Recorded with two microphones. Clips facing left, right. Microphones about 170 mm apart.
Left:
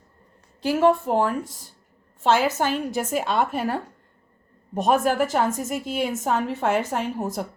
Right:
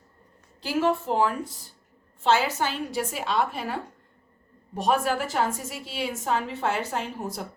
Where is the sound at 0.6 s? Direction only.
50° left (ahead or behind).